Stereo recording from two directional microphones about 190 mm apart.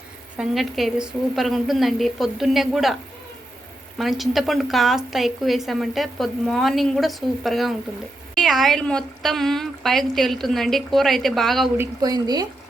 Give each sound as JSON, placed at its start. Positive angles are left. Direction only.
{"t": 0.3, "sound": "a woman's voice", "side_deg": 0}
{"t": 11.8, "sound": "speech", "side_deg": -20}